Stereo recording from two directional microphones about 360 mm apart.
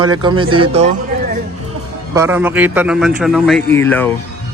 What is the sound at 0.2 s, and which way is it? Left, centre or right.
Speech, centre.